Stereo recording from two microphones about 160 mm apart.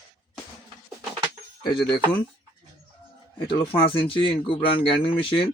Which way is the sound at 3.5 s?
35° left (ahead or behind).